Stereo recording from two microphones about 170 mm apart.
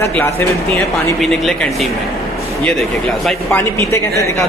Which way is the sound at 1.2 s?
Centre (ahead or behind).